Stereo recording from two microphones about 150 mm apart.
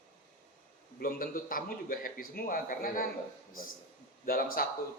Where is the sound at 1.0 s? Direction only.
75° left (ahead or behind).